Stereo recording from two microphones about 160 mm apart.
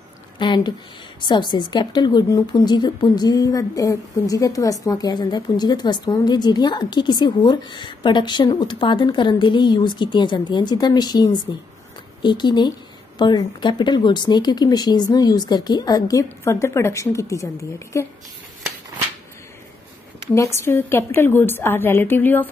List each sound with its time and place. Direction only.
0.4 s a woman's voice: 30° left (ahead or behind)
20.5 s a woman's voice: 15° left (ahead or behind)